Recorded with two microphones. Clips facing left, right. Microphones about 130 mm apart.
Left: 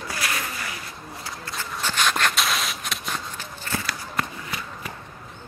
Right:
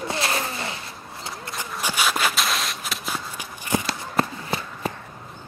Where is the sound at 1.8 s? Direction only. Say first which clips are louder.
Even; 10° right (ahead or behind).